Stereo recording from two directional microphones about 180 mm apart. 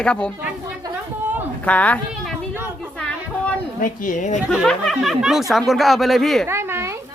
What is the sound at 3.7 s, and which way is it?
Speech, 50° left (ahead or behind).